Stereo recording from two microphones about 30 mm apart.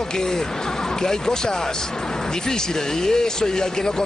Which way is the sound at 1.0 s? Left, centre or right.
Left.